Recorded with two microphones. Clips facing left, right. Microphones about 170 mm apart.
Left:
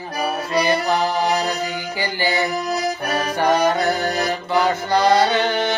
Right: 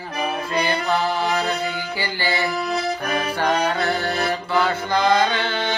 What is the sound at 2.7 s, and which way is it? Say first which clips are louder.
Accordion: left 1 dB; 40° left (ahead or behind).